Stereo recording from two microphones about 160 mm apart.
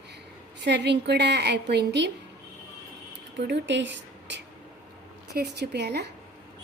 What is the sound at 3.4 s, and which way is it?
A woman's voice, 90° right.